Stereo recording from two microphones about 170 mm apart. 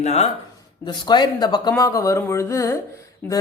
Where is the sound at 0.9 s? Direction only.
25° left (ahead or behind); by 3.4 s 10° left (ahead or behind).